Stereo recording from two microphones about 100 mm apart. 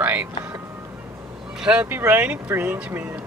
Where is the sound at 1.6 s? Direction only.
15° right (ahead or behind).